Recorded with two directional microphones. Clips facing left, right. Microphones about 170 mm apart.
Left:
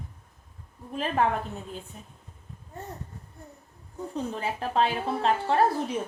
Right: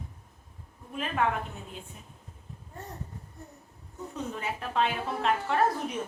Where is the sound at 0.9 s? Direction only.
35° left (ahead or behind).